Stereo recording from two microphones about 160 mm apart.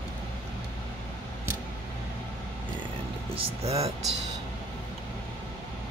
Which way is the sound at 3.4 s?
40° right (ahead or behind).